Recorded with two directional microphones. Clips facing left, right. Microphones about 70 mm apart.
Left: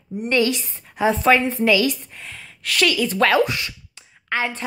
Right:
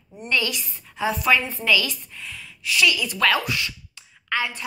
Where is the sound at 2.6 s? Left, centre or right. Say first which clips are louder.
Left 2 dB; left.